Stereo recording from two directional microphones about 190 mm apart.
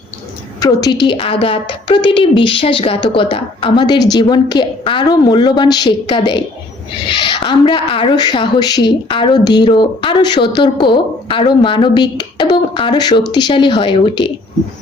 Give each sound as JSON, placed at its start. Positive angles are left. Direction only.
{"t": 0.6, "sound": "a woman's voice", "side_deg": 20}